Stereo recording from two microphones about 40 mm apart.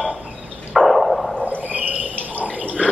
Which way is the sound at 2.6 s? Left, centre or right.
Right.